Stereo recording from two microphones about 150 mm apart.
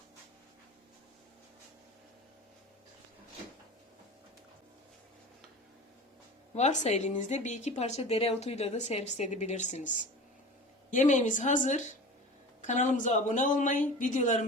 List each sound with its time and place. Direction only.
6.5 s a woman's voice: 50° left (ahead or behind)
10.9 s speech: 55° left (ahead or behind)